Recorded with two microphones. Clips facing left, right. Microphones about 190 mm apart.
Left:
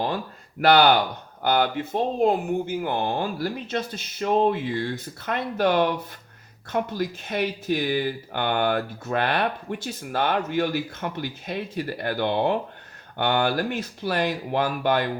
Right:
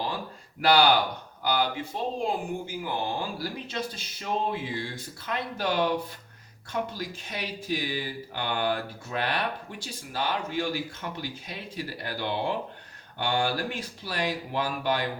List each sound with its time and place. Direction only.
0.6 s speech: 55° left (ahead or behind)